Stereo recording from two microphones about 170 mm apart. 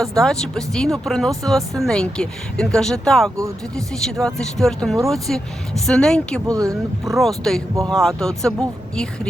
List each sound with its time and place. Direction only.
0.0 s speech: 5° left (ahead or behind)
6.5 s speech: 20° right (ahead or behind)
7.2 s speech: centre (ahead or behind)